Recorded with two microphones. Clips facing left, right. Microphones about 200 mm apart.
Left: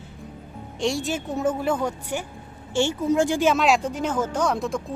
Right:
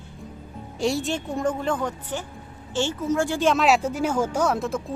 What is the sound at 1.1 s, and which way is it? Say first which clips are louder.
A woman's voice: left 1 dB; 5° left (ahead or behind).